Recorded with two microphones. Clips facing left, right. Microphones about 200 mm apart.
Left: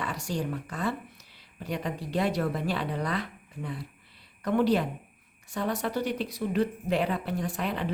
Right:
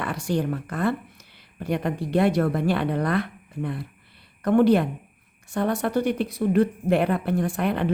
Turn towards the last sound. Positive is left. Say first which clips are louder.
# right 7 dB
turn(degrees=-60)  # may be behind; listen again after turning